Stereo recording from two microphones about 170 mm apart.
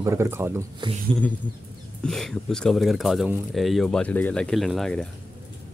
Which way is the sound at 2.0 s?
Centre (ahead or behind).